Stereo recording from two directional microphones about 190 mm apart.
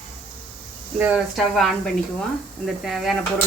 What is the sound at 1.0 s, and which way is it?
Speech, 5° right (ahead or behind).